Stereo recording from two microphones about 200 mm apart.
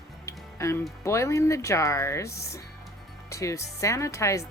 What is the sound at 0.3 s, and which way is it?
Music, 15° left (ahead or behind).